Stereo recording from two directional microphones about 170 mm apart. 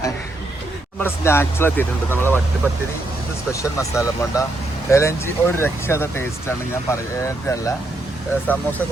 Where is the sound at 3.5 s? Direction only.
20° left (ahead or behind).